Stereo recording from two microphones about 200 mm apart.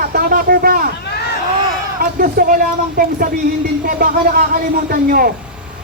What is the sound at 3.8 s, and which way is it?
Speech, 45° right (ahead or behind).